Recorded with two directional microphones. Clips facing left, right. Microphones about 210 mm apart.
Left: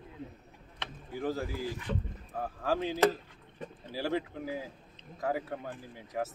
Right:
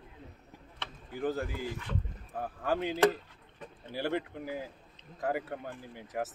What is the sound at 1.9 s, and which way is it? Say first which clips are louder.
Speech: left 3 dB; 40° left (ahead or behind).